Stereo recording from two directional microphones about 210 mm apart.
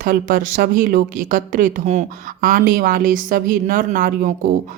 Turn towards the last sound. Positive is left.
turn(degrees=-40)  # may be behind; listen again after turning